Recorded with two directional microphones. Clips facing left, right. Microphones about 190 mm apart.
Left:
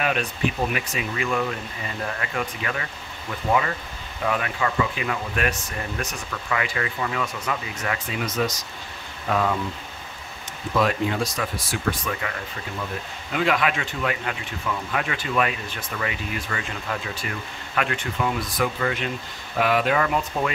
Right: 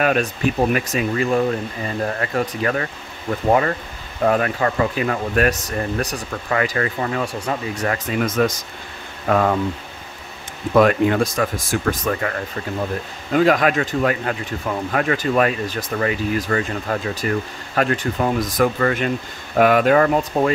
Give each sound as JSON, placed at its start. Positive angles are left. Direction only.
{"t": 0.0, "sound": "speech", "side_deg": -45}
{"t": 10.7, "sound": "speech", "side_deg": -60}
{"t": 13.3, "sound": "speech", "side_deg": -40}